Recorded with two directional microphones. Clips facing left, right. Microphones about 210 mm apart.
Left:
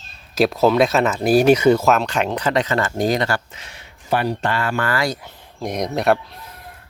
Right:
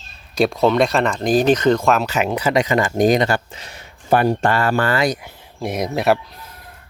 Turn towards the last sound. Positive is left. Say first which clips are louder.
# even
turn(degrees=0)  # may be behind; listen again after turning